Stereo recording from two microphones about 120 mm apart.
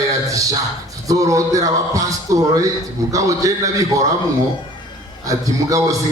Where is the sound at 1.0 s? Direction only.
30° right (ahead or behind).